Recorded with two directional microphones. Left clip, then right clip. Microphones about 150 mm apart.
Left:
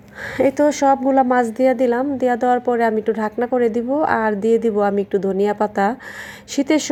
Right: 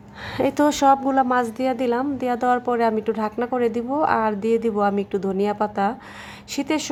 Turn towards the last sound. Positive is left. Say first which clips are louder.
# left 6 dB
turn(degrees=15)  # may be behind; listen again after turning